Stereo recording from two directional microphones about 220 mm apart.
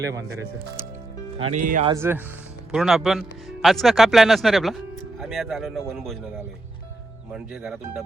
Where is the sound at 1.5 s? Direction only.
35° right (ahead or behind).